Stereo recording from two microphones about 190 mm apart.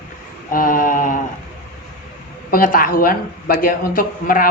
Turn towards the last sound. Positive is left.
turn(degrees=45)  # may be behind; listen again after turning